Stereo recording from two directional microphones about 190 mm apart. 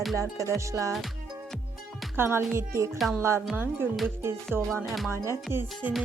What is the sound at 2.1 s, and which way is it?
A woman's voice, 10° right (ahead or behind).